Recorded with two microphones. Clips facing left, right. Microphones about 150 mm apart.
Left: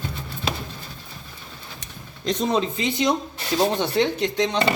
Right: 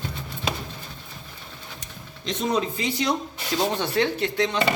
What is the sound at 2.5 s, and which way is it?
A man's voice, 25° left (ahead or behind).